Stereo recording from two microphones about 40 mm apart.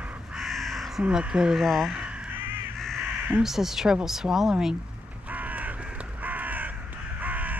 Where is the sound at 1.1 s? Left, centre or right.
Right.